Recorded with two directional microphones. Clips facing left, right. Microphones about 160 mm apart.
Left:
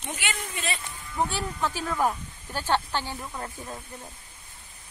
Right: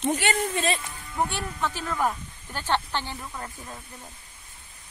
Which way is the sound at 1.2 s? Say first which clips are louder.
Even; 5° left (ahead or behind).